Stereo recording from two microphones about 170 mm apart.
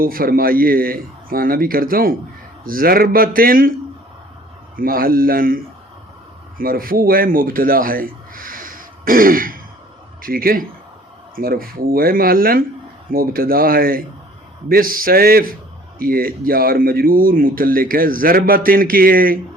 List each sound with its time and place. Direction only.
0.0 s speech: 60° right (ahead or behind)
4.8 s a man's voice: 55° right (ahead or behind)